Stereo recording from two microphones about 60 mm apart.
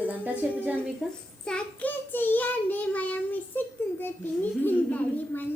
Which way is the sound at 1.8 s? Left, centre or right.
Left.